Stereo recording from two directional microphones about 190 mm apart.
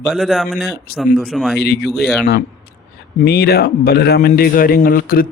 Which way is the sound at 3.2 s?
55° left (ahead or behind).